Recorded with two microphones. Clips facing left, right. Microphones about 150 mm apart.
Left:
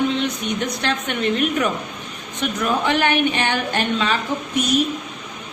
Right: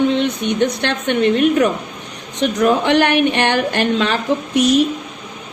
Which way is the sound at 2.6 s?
65° right (ahead or behind).